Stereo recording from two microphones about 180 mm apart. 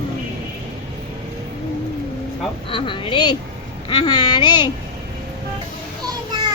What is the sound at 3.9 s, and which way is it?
Speech, 25° left (ahead or behind).